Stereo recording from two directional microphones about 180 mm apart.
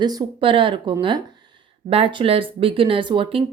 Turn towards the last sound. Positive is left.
turn(degrees=-30)  # may be behind; listen again after turning